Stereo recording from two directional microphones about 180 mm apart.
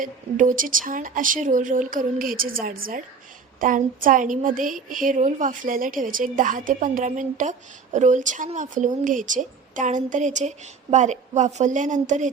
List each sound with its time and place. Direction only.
0.0 s a woman's voice: 45° right (ahead or behind)